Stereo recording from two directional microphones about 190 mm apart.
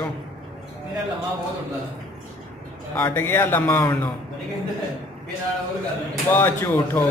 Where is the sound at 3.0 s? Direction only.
10° left (ahead or behind).